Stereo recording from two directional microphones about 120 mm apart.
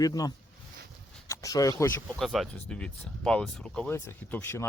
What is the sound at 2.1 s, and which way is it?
Speech, centre (ahead or behind).